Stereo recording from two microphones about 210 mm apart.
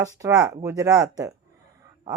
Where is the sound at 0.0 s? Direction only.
15° right (ahead or behind).